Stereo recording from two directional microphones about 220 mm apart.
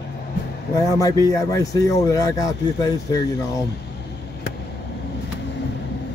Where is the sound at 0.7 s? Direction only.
15° left (ahead or behind).